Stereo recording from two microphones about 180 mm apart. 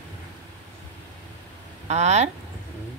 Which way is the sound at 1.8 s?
40° right (ahead or behind).